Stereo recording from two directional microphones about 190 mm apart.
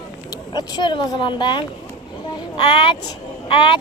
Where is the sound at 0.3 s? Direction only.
20° left (ahead or behind).